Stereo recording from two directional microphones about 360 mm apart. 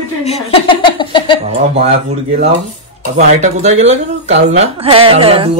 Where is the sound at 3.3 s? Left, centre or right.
Centre.